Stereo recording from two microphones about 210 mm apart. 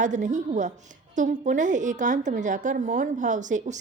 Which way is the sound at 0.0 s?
35° right (ahead or behind).